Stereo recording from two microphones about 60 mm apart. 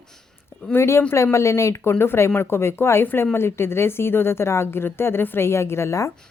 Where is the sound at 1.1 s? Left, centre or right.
Left.